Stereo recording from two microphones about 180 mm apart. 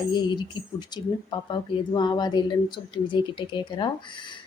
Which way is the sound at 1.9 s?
25° left (ahead or behind).